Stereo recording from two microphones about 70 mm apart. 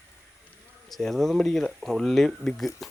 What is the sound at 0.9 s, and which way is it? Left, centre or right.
Speech, centre.